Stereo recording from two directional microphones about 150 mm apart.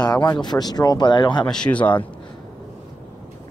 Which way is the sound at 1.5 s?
5° left (ahead or behind).